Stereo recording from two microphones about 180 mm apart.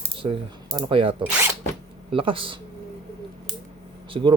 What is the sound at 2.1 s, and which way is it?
Speech, 30° right (ahead or behind).